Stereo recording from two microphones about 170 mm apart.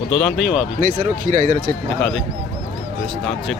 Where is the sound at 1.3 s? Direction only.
50° right (ahead or behind).